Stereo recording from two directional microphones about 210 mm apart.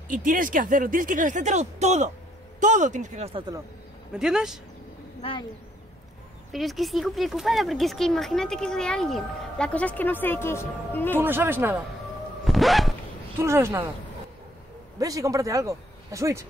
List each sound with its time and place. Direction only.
0.1 s speech: 40° right (ahead or behind)
3.3 s speech: 20° right (ahead or behind)
4.1 s speech: 5° right (ahead or behind)
5.2 s speech: 25° left (ahead or behind)
6.5 s speech: centre (ahead or behind)
11.1 s speech: 10° right (ahead or behind)
12.4 s zipper: centre (ahead or behind)
13.4 s speech: 15° right (ahead or behind)
15.0 s speech: 15° right (ahead or behind)